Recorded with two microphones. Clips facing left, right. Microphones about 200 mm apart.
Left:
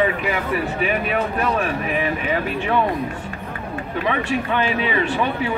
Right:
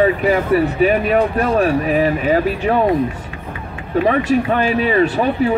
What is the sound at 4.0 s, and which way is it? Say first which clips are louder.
Speech: right 8 dB; 40° right (ahead or behind).